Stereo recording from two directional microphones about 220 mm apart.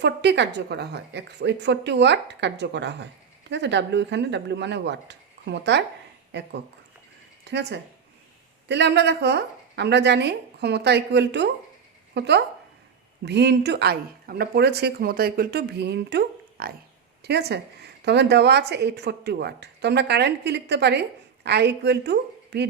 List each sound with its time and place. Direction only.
0.0 s a woman's voice: 50° right (ahead or behind)